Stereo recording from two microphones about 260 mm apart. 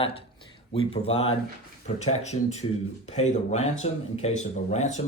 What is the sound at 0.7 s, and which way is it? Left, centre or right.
Speech, left.